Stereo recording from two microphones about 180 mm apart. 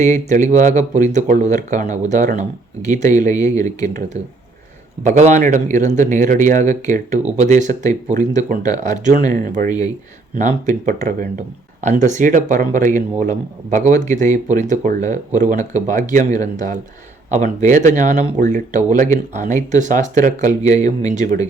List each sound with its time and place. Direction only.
0.0 s speech: 45° right (ahead or behind)
5.0 s a man's voice: 30° right (ahead or behind)
5.3 s speech: 45° right (ahead or behind)
9.6 s speech: 20° left (ahead or behind)
10.3 s speech: 45° right (ahead or behind)